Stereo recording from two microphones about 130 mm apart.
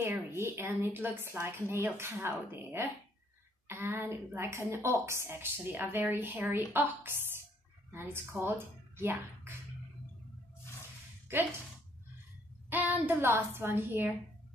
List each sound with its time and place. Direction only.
0.0 s a woman's voice: 20° right (ahead or behind)
12.6 s a woman's voice: 15° right (ahead or behind)